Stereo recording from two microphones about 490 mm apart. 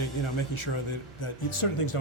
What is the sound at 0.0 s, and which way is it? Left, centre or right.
Speech, left.